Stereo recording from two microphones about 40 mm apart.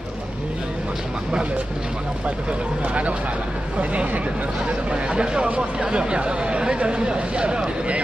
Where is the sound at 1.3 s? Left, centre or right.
Right.